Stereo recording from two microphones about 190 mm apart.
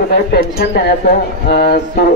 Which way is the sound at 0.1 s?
55° left (ahead or behind).